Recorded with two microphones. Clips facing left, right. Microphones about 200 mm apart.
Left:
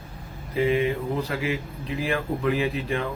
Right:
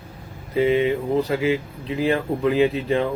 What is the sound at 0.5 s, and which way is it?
Speech, 30° right (ahead or behind).